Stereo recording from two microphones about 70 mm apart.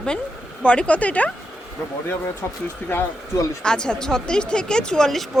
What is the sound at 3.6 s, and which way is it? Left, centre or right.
Speech, centre.